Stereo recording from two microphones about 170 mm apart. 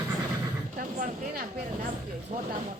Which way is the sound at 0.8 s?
50° right (ahead or behind).